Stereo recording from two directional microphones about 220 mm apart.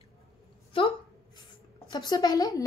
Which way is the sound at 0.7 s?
25° left (ahead or behind).